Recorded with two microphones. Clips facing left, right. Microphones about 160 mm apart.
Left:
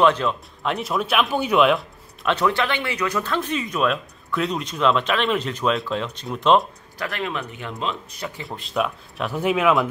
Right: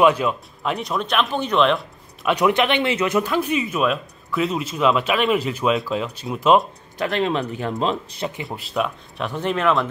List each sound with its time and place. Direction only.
0.0 s speech: 10° right (ahead or behind)
2.2 s speech: 15° right (ahead or behind)
3.3 s speech: 10° right (ahead or behind)
7.0 s speech: 25° right (ahead or behind)
8.5 s speech: centre (ahead or behind)